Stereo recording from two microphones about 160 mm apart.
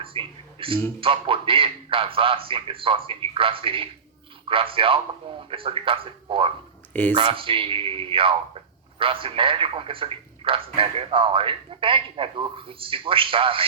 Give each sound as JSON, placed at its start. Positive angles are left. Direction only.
{"t": 0.0, "sound": "speech", "side_deg": -35}